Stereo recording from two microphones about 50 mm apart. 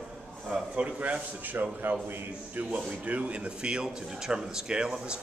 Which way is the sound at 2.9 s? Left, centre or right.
Right.